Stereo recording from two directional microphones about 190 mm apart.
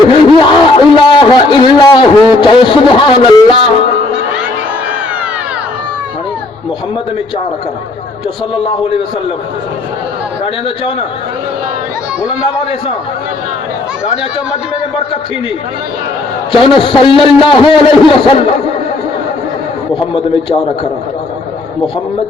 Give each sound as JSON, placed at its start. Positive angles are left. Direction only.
{"t": 0.1, "sound": "a sound", "side_deg": 25}
{"t": 16.5, "sound": "a man's voice", "side_deg": 25}
{"t": 20.0, "sound": "a man's voice", "side_deg": 25}